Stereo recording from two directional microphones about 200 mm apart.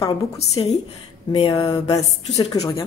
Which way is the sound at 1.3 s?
25° left (ahead or behind).